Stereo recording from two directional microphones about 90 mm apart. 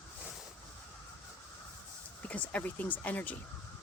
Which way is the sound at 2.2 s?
15° left (ahead or behind).